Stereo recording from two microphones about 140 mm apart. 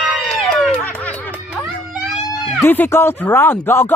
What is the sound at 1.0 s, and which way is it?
Snicker, 10° left (ahead or behind).